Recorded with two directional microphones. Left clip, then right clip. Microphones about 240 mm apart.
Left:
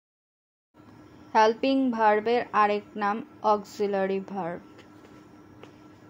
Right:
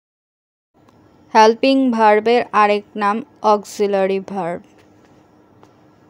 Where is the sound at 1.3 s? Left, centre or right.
Right.